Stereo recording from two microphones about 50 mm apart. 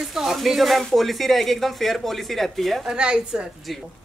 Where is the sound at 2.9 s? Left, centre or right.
Centre.